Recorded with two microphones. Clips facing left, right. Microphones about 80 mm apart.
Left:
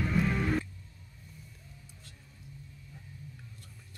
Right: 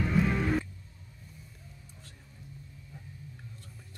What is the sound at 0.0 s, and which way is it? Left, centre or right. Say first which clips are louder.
Music: right 2 dB; centre.